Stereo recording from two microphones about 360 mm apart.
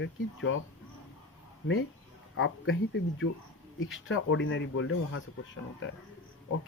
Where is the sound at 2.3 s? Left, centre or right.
Left.